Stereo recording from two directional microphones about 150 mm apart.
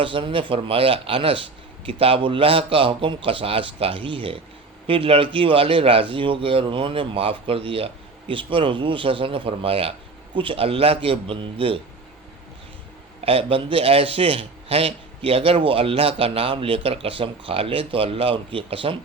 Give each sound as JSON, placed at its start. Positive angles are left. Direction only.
{"t": 0.0, "sound": "a man's voice", "side_deg": -35}
{"t": 13.2, "sound": "a man's voice", "side_deg": -40}